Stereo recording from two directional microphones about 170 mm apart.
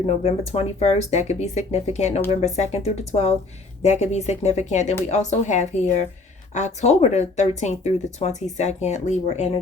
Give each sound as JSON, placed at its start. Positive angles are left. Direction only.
{"t": 0.0, "sound": "speech", "side_deg": 40}